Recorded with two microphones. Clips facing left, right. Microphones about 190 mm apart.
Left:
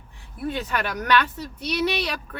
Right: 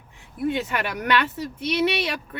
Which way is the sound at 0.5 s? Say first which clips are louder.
Right 1 dB; 25° right (ahead or behind).